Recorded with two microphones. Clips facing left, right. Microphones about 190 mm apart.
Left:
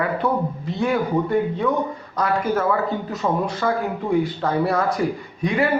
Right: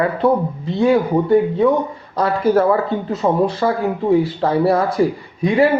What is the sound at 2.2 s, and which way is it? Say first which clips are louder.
Speech: right 6 dB; 30° right (ahead or behind).